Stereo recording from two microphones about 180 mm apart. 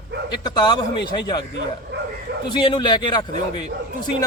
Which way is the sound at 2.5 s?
25° left (ahead or behind).